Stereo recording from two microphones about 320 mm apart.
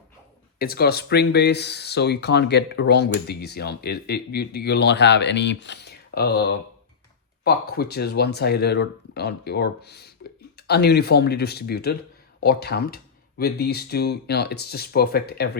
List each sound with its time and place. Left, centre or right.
0.6 s speech: left
7.4 s speech: left